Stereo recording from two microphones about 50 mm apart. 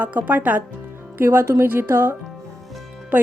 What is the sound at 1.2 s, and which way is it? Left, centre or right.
Speech, right.